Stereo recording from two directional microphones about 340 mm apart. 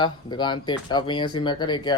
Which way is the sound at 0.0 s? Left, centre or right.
Centre.